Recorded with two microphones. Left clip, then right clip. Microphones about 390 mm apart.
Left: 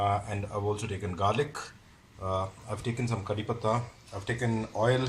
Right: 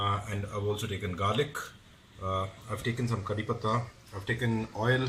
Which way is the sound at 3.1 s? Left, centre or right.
Centre.